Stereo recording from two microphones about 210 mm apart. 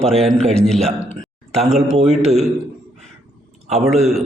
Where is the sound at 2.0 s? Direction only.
30° right (ahead or behind).